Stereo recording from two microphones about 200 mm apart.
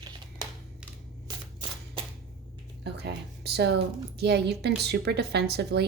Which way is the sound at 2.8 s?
55° right (ahead or behind).